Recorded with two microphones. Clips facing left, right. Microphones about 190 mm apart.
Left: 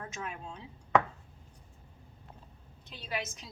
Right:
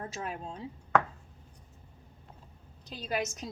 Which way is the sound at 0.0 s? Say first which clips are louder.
Right 3 dB; 35° right (ahead or behind).